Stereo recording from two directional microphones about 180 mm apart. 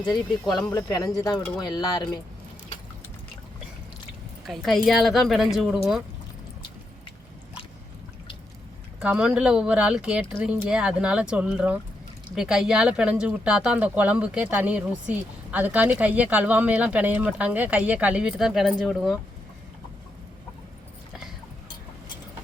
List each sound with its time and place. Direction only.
0.5 s speech: 20° left (ahead or behind)
4.4 s speech: centre (ahead or behind)
9.0 s speech: 5° right (ahead or behind)